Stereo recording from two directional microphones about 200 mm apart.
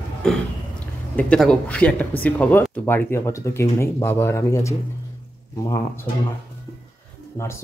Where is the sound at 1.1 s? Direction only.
5° left (ahead or behind).